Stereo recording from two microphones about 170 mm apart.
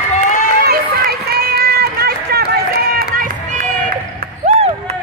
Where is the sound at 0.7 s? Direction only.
65° right (ahead or behind).